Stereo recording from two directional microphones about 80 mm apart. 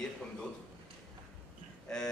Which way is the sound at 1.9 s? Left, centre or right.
Centre.